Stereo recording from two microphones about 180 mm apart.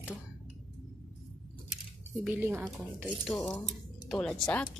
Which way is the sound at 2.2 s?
10° right (ahead or behind).